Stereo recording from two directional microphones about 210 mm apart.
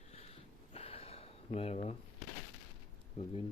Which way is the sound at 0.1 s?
30° left (ahead or behind).